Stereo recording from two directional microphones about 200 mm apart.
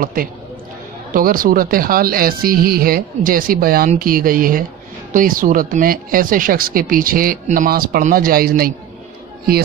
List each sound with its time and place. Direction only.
0.0 s speech: 45° right (ahead or behind)